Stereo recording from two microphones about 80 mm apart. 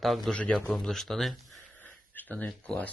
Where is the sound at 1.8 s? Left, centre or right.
Left.